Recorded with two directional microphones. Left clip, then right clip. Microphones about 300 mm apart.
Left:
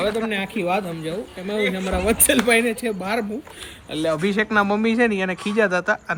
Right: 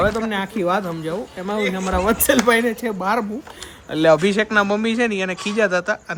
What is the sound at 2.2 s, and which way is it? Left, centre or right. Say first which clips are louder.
Speech: right 1 dB; centre.